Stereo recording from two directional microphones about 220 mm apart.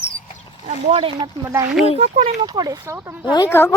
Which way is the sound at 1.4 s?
10° right (ahead or behind).